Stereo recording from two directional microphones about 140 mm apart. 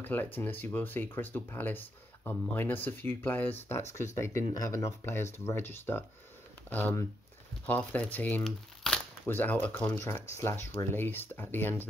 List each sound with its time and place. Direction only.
0.0 s speech: 15° left (ahead or behind)
8.5 s crumpling: centre (ahead or behind)
9.2 s speech: 10° left (ahead or behind)